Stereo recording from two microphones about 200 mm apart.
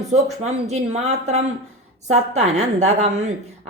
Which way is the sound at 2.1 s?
35° right (ahead or behind).